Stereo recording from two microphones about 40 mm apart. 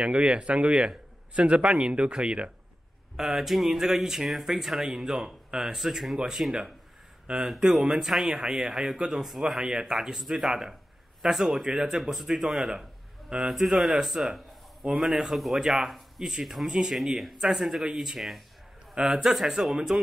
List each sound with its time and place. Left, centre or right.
0.0 s a man's voice: right
3.2 s speech: centre
7.9 s speech: centre
12.0 s speech: centre
15.6 s speech: centre
16.9 s speech: centre